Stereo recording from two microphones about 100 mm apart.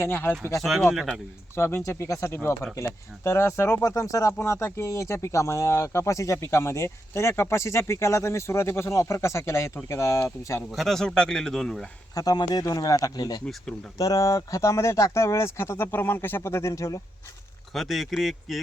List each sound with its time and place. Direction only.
0.0 s speech: 20° left (ahead or behind)
0.6 s a man's voice: centre (ahead or behind)
1.5 s speech: 25° left (ahead or behind)
10.7 s a man's voice: centre (ahead or behind)
12.1 s speech: 40° left (ahead or behind)
13.4 s speech: 5° left (ahead or behind)
14.0 s speech: 35° left (ahead or behind)
17.7 s a man's voice: centre (ahead or behind)